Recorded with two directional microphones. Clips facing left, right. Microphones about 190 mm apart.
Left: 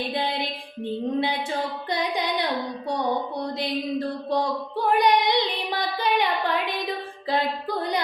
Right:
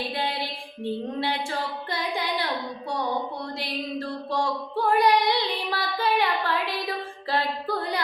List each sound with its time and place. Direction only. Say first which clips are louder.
1.2 s a sound: left 2 dB; 20° left (ahead or behind)
3.4 s female singing: left 5 dB; 20° left (ahead or behind)
7.3 s music: left 2 dB; 20° left (ahead or behind)